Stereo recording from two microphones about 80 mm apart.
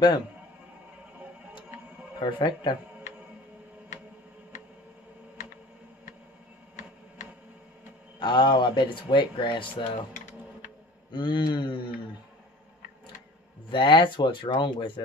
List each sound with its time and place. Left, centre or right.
2.1 s mantra: left
8.2 s speech: left
11.1 s mantra: left
13.7 s speech: left